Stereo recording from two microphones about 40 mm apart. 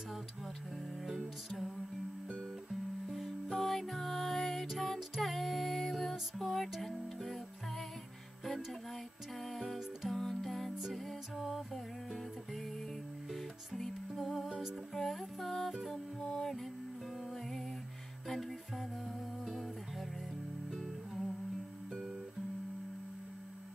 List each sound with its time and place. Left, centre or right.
1.0 s music: centre
3.1 s music: centre
9.4 s music: centre
19.4 s music: centre